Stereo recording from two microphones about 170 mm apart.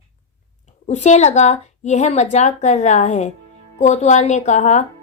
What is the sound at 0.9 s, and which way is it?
A woman's voice, 45° left (ahead or behind).